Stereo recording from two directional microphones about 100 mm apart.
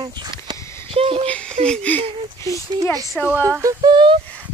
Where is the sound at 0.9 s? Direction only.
70° right (ahead or behind).